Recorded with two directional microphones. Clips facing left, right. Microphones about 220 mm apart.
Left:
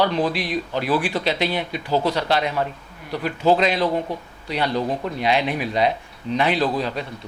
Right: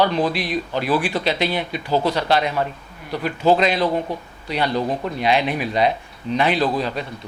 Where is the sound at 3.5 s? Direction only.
15° right (ahead or behind).